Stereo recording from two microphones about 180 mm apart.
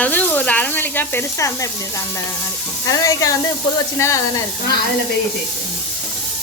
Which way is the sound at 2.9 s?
20° left (ahead or behind).